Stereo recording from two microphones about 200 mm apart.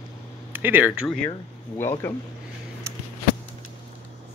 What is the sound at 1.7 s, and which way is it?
Speech, 10° left (ahead or behind).